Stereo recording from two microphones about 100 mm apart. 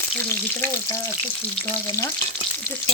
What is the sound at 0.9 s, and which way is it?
Frying, 35° left (ahead or behind).